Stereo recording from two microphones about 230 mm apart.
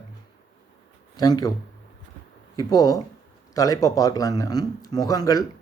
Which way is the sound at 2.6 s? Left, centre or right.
Centre.